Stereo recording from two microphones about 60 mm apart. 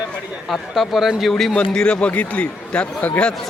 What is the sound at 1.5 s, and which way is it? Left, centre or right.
Speech, centre.